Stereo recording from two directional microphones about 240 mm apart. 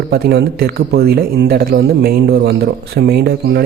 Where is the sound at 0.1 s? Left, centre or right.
Right.